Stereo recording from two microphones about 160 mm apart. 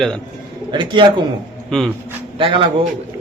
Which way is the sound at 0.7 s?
30° right (ahead or behind).